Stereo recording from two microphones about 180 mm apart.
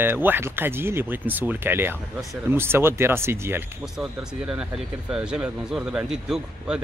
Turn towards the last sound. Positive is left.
turn(degrees=-5)  # may be behind; listen again after turning